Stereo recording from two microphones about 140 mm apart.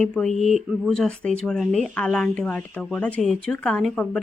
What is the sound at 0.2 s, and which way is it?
Speech, centre (ahead or behind).